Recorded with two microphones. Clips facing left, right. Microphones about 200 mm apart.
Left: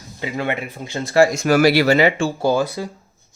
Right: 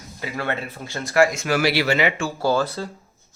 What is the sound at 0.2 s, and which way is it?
Speech, 20° left (ahead or behind).